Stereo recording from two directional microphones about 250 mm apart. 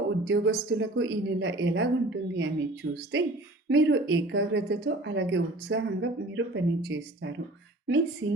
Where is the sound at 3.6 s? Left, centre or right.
Right.